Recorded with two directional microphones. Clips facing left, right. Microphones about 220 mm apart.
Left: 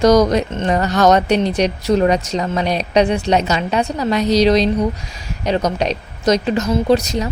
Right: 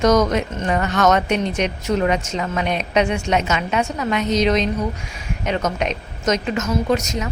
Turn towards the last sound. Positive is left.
turn(degrees=35)  # may be behind; listen again after turning